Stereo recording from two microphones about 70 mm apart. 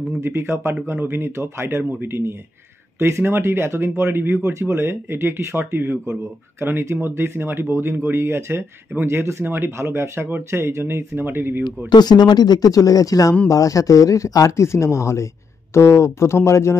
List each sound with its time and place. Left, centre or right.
0.1 s speech: right
11.9 s speech: left